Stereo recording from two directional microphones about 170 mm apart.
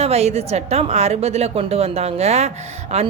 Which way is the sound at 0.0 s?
40° right (ahead or behind).